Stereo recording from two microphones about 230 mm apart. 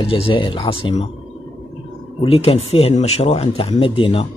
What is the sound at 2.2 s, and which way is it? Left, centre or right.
Speech, left.